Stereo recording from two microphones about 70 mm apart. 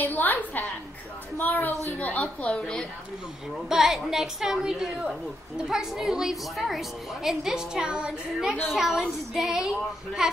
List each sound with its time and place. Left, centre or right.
0.0 s a sound: left
1.5 s a woman's voice: left
3.6 s a woman's voice: centre